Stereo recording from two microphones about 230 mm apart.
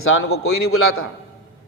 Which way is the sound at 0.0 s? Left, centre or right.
Left.